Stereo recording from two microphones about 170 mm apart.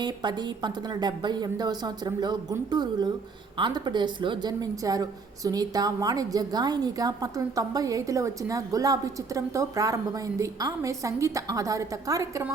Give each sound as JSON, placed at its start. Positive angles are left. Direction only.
{"t": 0.0, "sound": "a woman's voice", "side_deg": -25}